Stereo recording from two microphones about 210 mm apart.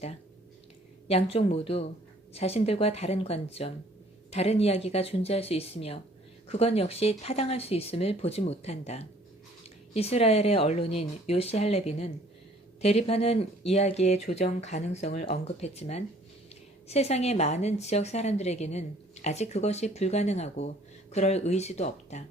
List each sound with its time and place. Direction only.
1.0 s a woman's voice: 30° left (ahead or behind)